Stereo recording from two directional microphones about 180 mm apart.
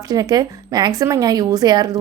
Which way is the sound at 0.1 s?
20° right (ahead or behind).